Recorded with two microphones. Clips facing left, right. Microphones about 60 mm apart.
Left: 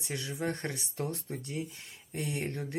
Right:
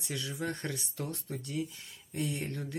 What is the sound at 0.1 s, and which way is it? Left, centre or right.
Speech, left.